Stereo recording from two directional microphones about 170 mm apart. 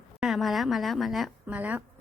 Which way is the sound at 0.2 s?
Centre (ahead or behind).